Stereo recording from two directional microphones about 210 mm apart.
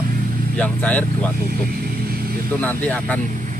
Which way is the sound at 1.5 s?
45° right (ahead or behind).